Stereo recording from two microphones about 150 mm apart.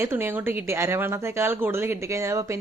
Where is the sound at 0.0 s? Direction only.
15° right (ahead or behind).